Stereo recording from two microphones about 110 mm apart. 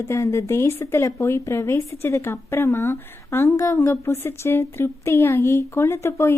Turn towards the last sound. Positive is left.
turn(degrees=25)  # may be behind; listen again after turning